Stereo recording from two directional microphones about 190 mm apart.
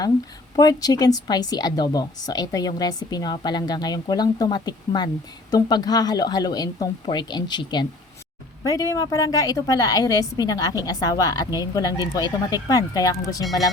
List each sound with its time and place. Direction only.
0.5 s a woman's voice: 20° left (ahead or behind)